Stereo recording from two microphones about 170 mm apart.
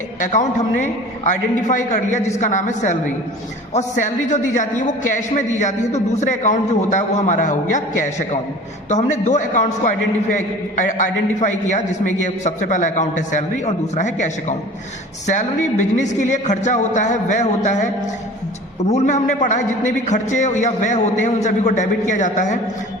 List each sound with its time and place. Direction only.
0.2 s a man's voice: 45° left (ahead or behind)